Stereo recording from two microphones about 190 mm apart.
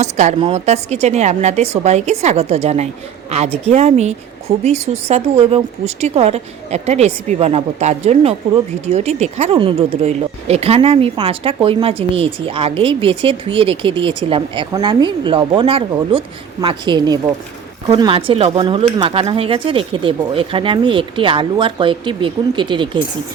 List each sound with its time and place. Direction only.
0.0 s a woman's voice: 35° right (ahead or behind)